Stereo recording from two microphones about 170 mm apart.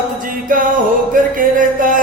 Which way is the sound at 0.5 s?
55° right (ahead or behind).